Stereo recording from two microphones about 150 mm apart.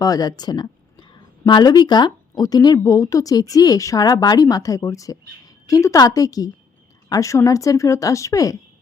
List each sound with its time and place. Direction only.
0.0 s speech: 25° left (ahead or behind)